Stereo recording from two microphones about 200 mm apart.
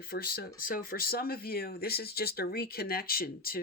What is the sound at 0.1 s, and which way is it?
Speech, 50° left (ahead or behind).